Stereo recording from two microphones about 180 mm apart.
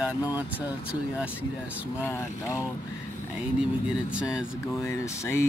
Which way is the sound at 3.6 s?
5° right (ahead or behind).